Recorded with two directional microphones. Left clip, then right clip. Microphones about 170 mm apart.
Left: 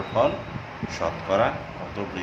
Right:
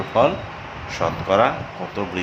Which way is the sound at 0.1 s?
20° right (ahead or behind).